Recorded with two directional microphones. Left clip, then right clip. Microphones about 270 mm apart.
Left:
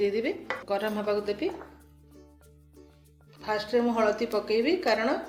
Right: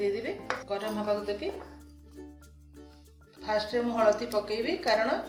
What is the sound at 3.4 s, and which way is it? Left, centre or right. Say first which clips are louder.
A woman's voice: left 2 dB; left.